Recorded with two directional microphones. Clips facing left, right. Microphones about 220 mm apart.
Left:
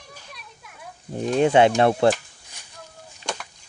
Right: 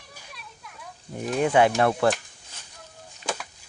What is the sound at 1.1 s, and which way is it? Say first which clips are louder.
Speech: left 4 dB; 25° left (ahead or behind).